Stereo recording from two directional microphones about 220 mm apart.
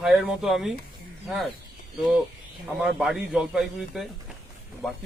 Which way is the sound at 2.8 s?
Centre (ahead or behind).